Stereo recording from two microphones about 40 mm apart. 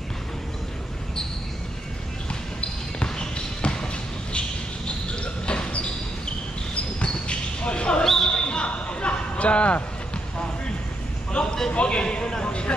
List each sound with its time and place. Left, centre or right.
3.0 s basketball bounce: left
8.0 s basketball bounce: centre
8.3 s basketball bounce: left
11.3 s a sound: centre
11.7 s a man's voice: left
12.4 s a sound: left